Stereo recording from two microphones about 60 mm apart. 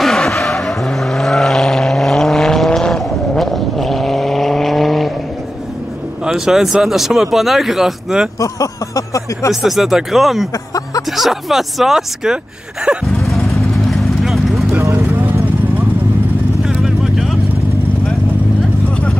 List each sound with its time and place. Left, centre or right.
0.0 s vehicle: centre
6.2 s speech: centre
8.4 s speech: left
9.5 s speech: centre
13.0 s vehicle: centre
14.8 s vehicle: right
16.6 s vehicle: centre